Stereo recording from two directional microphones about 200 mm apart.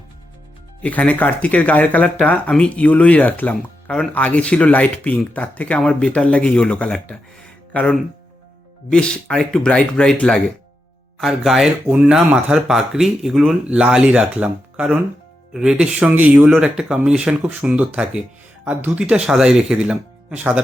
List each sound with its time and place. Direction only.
0.8 s speech: 5° left (ahead or behind)